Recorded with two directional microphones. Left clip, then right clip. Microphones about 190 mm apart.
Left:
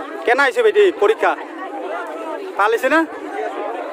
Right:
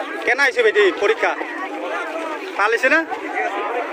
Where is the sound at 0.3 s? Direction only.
35° left (ahead or behind).